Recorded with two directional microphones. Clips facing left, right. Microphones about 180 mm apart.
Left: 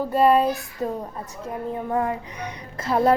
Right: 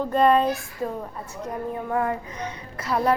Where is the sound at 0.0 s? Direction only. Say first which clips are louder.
Left 1 dB; 5° left (ahead or behind).